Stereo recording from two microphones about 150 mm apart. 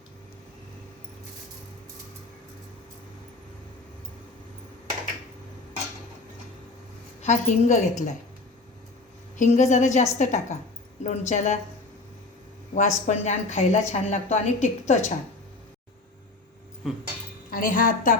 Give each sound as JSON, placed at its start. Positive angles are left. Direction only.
{"t": 7.2, "sound": "a woman's voice", "side_deg": 50}
{"t": 9.4, "sound": "a woman's voice", "side_deg": 55}
{"t": 12.7, "sound": "a woman's voice", "side_deg": 55}
{"t": 17.5, "sound": "a woman's voice", "side_deg": 65}